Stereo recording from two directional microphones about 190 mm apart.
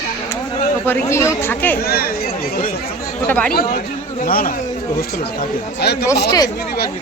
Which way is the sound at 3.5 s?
50° left (ahead or behind).